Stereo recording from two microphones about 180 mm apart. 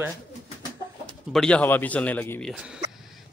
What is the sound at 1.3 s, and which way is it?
A man's voice, 5° left (ahead or behind).